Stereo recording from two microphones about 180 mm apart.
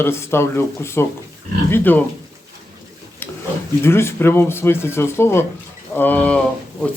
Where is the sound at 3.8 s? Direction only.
15° left (ahead or behind).